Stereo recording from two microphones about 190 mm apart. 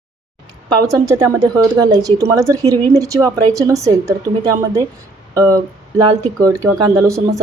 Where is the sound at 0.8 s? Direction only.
15° right (ahead or behind).